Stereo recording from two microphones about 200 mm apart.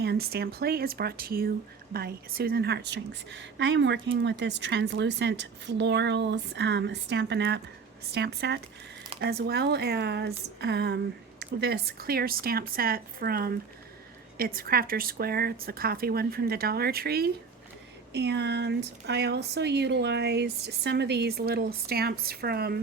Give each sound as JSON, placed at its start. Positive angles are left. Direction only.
{"t": 0.0, "sound": "a woman's voice", "side_deg": -55}